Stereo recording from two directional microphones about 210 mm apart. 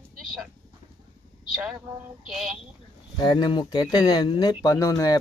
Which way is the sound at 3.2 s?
20° left (ahead or behind).